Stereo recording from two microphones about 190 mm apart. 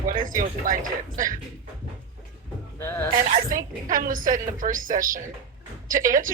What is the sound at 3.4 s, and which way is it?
Speech, 45° right (ahead or behind).